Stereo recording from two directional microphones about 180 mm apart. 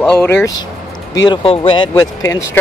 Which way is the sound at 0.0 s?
5° left (ahead or behind).